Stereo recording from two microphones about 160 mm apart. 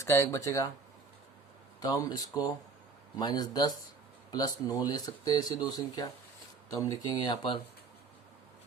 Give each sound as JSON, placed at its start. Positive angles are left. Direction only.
{"t": 0.0, "sound": "speech", "side_deg": 20}
{"t": 1.8, "sound": "speech", "side_deg": 25}